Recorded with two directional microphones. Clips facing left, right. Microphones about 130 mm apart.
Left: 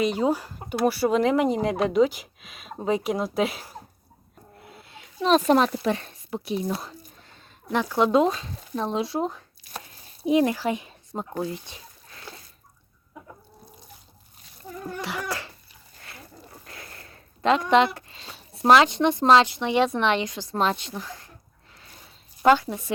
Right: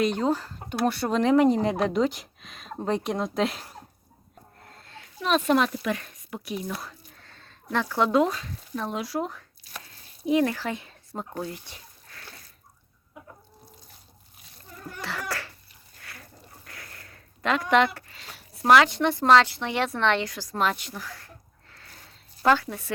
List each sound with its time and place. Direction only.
0.0 s speech: 5° left (ahead or behind)
4.6 s a sound: 10° left (ahead or behind)
5.2 s speech: 35° left (ahead or behind)
15.0 s a sound: 15° left (ahead or behind)
16.0 s dog: 25° left (ahead or behind)
16.6 s speech: 25° left (ahead or behind)
21.7 s zipper: 15° left (ahead or behind)